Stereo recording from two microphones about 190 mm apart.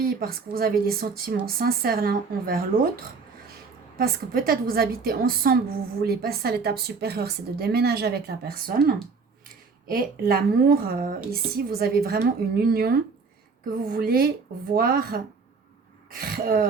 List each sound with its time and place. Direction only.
0.0 s a woman's voice: 50° right (ahead or behind)